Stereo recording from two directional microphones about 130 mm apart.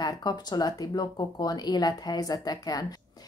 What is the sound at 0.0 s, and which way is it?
Speech, 30° left (ahead or behind).